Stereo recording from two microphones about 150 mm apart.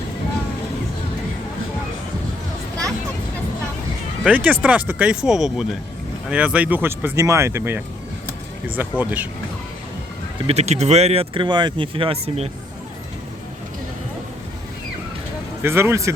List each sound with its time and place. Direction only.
4.2 s speech: 10° right (ahead or behind)
10.4 s speech: 45° right (ahead or behind)
15.6 s speech: 15° right (ahead or behind)